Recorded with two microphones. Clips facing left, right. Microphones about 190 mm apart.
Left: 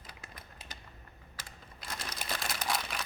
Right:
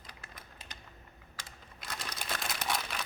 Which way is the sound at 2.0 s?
Centre (ahead or behind).